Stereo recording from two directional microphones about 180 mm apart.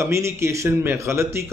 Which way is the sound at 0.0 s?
15° right (ahead or behind).